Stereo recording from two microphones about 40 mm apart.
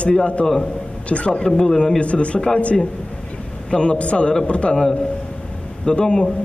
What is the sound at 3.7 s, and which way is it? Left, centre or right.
A man's voice, left.